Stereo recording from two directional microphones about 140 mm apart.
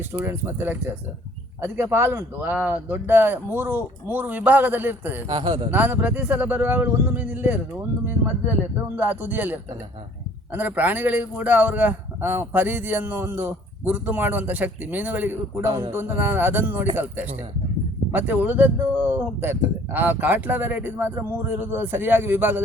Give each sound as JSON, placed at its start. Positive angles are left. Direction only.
{"t": 0.1, "sound": "a man's voice", "side_deg": -15}
{"t": 5.3, "sound": "speech", "side_deg": -30}
{"t": 5.7, "sound": "a man's voice", "side_deg": -10}
{"t": 9.0, "sound": "a man's voice", "side_deg": -10}